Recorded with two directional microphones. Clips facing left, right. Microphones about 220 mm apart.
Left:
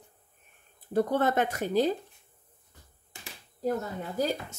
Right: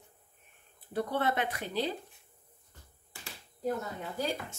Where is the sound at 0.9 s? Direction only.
45° left (ahead or behind).